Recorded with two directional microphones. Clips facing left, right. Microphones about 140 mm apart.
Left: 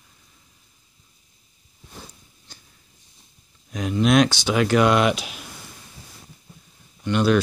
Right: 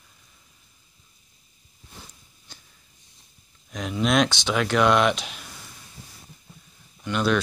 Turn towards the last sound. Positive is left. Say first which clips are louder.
# left 4 dB
turn(degrees=0)  # may be behind; listen again after turning